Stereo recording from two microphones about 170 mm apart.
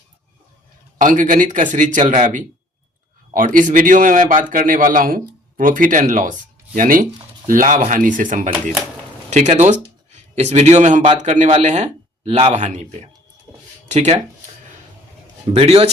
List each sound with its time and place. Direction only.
0.9 s a man's voice: 50° right (ahead or behind)
15.5 s a man's voice: 35° right (ahead or behind)